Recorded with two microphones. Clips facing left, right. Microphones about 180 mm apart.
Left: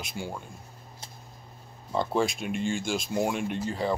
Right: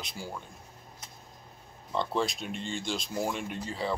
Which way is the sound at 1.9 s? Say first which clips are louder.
Left 4 dB; 5° left (ahead or behind).